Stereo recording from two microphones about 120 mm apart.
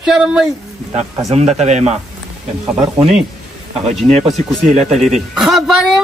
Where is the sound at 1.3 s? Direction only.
70° right (ahead or behind).